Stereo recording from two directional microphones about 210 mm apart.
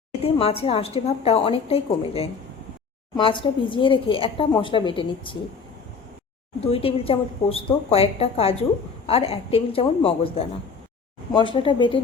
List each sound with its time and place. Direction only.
0.2 s a woman's voice: 25° left (ahead or behind)
6.7 s a woman's voice: 25° left (ahead or behind)